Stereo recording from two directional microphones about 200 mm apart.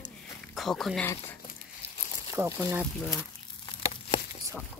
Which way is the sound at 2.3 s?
10° right (ahead or behind).